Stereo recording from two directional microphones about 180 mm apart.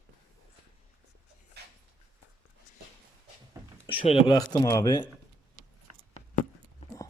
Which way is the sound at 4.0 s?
30° left (ahead or behind).